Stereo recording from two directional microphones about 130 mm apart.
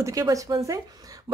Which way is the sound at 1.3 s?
30° right (ahead or behind).